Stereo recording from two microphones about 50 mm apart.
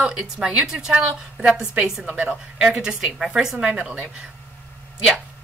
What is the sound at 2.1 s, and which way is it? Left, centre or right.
Speech, right.